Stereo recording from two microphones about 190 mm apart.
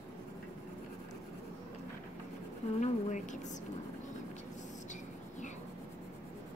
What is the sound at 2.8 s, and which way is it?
Speech, 40° left (ahead or behind).